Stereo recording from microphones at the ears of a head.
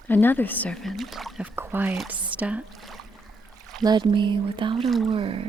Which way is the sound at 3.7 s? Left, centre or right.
Right.